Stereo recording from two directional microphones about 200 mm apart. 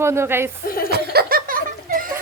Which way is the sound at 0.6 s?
45° left (ahead or behind).